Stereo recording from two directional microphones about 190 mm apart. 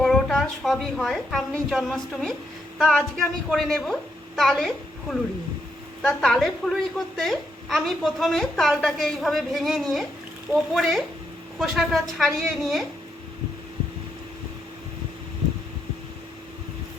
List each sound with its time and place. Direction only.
0.0 s a woman's voice: centre (ahead or behind)